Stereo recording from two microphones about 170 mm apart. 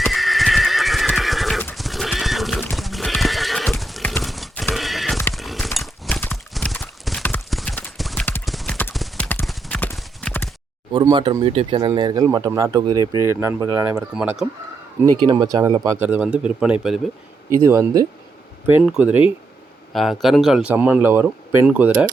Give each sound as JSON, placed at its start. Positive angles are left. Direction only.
{"t": 0.0, "sound": "neigh", "side_deg": 0}
{"t": 2.7, "sound": "clip-clop", "side_deg": 0}
{"t": 4.7, "sound": "neigh", "side_deg": 0}
{"t": 5.3, "sound": "horse", "side_deg": 0}
{"t": 6.5, "sound": "clip-clop", "side_deg": 5}
{"t": 11.1, "sound": "speech", "side_deg": -25}
{"t": 11.9, "sound": "speech", "side_deg": -25}
{"t": 14.2, "sound": "speech", "side_deg": -5}
{"t": 15.2, "sound": "speech", "side_deg": -25}
{"t": 16.0, "sound": "speech", "side_deg": -10}
{"t": 17.6, "sound": "speech", "side_deg": -15}
{"t": 18.7, "sound": "speech", "side_deg": -5}